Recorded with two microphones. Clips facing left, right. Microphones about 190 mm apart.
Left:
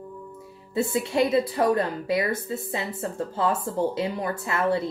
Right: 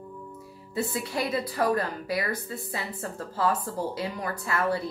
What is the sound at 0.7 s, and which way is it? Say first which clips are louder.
A woman's voice: left 6 dB; 25° left (ahead or behind).